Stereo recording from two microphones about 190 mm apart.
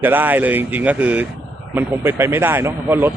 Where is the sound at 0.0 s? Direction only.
10° right (ahead or behind).